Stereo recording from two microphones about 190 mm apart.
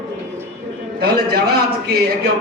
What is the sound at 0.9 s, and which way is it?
A man's voice, 55° right (ahead or behind).